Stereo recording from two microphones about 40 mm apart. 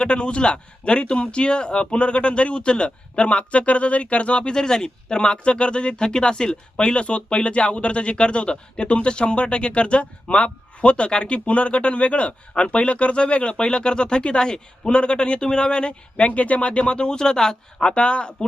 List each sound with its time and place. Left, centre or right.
0.0 s speech: left